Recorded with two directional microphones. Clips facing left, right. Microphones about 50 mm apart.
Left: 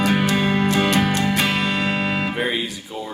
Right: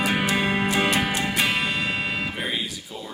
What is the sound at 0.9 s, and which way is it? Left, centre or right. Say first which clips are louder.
Music: left 4 dB; left.